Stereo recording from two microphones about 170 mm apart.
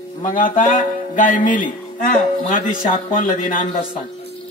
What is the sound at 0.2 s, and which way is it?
A man's voice, 50° left (ahead or behind).